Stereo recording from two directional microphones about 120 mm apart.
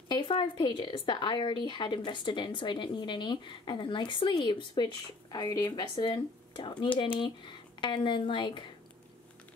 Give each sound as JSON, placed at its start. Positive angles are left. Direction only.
{"t": 0.1, "sound": "speech", "side_deg": 40}